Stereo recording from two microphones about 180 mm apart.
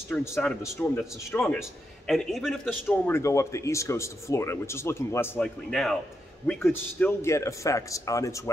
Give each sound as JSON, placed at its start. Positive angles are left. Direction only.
{"t": 0.1, "sound": "a man's voice", "side_deg": 10}
{"t": 3.1, "sound": "speech", "side_deg": 15}